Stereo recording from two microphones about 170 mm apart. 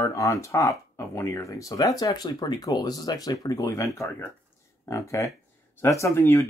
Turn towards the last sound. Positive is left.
turn(degrees=15)  # may be behind; listen again after turning